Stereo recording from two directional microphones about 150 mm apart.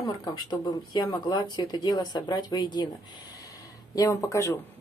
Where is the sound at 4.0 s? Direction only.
20° left (ahead or behind).